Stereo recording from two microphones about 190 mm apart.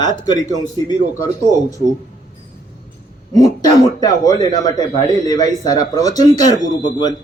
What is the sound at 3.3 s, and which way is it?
Speech, 20° left (ahead or behind).